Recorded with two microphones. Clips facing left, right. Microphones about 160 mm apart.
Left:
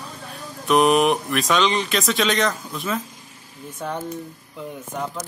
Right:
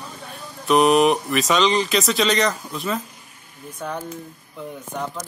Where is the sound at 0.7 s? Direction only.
Centre (ahead or behind).